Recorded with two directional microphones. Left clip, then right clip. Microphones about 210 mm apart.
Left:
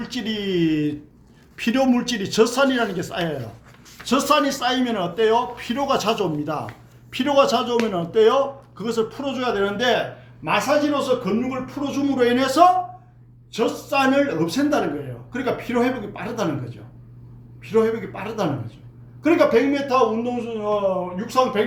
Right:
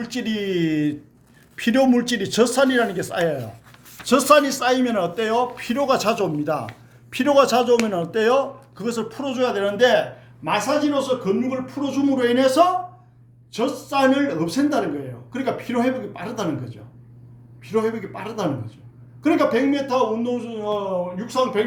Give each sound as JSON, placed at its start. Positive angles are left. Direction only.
{"t": 0.0, "sound": "a man's voice", "side_deg": -30}
{"t": 17.6, "sound": "a man's voice", "side_deg": -20}